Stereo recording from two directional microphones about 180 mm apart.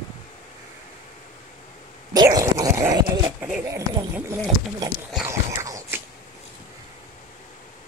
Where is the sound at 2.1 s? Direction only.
20° right (ahead or behind).